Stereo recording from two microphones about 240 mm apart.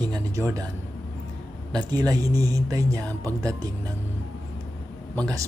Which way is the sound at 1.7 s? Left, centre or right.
Centre.